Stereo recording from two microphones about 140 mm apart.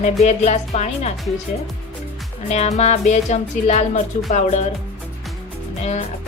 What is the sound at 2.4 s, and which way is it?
Speech, 50° left (ahead or behind).